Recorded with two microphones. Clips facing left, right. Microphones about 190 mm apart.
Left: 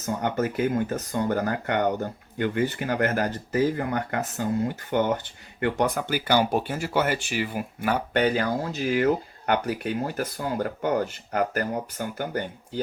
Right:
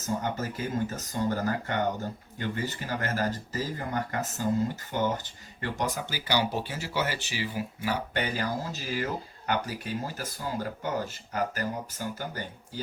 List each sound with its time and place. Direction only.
0.0 s speech: 60° left (ahead or behind)